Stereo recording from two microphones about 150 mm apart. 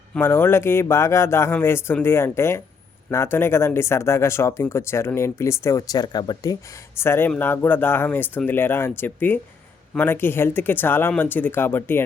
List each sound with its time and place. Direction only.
0.1 s speech: 15° left (ahead or behind)
7.0 s speech: 15° left (ahead or behind)